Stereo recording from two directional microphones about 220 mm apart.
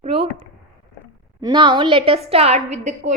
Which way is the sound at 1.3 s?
20° right (ahead or behind).